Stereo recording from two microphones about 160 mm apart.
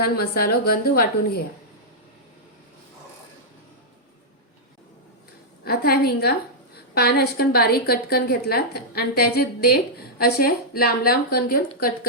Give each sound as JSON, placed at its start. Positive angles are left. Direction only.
{"t": 0.0, "sound": "a woman's voice", "side_deg": 70}
{"t": 5.6, "sound": "a woman's voice", "side_deg": 75}